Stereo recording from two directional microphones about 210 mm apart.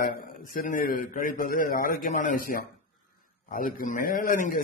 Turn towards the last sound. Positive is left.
turn(degrees=40)  # may be behind; listen again after turning